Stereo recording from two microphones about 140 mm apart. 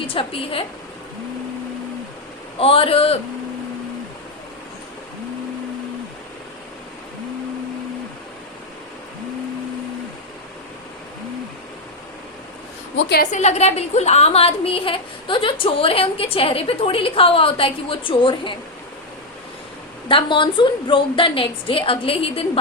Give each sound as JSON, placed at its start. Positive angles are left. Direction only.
{"t": 0.1, "sound": "a woman's voice", "side_deg": 40}
{"t": 2.6, "sound": "a man's voice", "side_deg": 40}
{"t": 13.1, "sound": "a woman's voice", "side_deg": 55}
{"t": 20.1, "sound": "a woman's voice", "side_deg": 35}